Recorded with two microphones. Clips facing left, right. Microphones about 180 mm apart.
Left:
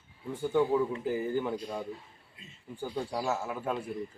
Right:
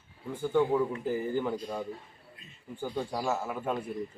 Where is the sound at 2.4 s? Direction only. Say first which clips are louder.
Left 2 dB; 25° left (ahead or behind).